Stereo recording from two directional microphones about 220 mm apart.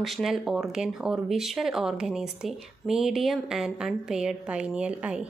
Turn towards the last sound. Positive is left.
turn(degrees=-5)  # may be behind; listen again after turning